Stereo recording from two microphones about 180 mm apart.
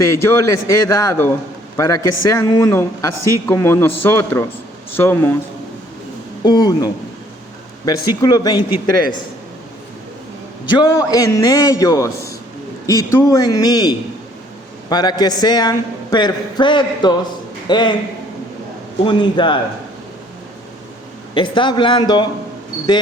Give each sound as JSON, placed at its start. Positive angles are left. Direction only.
{"t": 0.0, "sound": "a man's voice", "side_deg": 15}
{"t": 6.4, "sound": "a man's voice", "side_deg": 25}
{"t": 10.8, "sound": "a man's voice", "side_deg": 20}
{"t": 19.0, "sound": "a man's voice", "side_deg": 25}
{"t": 21.3, "sound": "a man's voice", "side_deg": 25}